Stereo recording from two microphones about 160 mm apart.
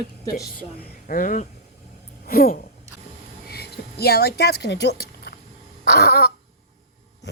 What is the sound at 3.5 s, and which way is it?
Speech, 85° left.